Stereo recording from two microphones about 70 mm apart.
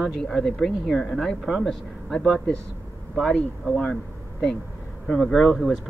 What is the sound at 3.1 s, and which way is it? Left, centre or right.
Speech, centre.